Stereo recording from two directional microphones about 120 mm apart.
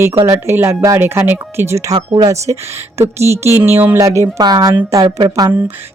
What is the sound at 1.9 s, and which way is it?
A woman's voice, 35° right (ahead or behind).